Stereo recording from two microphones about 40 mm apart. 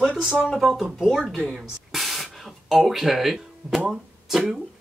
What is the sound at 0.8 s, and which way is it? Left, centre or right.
Speech, centre.